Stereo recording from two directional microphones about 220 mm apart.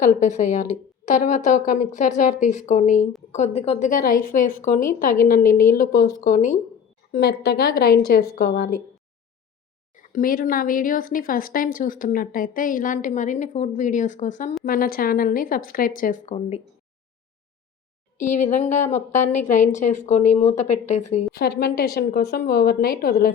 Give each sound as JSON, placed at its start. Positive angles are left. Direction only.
{"t": 0.0, "sound": "speech", "side_deg": 35}
{"t": 7.1, "sound": "a woman's voice", "side_deg": 45}
{"t": 9.9, "sound": "speech", "side_deg": 35}
{"t": 18.2, "sound": "speech", "side_deg": 35}
{"t": 21.3, "sound": "a woman's voice", "side_deg": 45}